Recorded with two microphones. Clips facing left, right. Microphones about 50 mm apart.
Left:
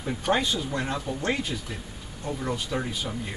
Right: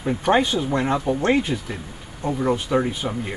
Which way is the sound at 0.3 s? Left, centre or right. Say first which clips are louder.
Right 6 dB; right.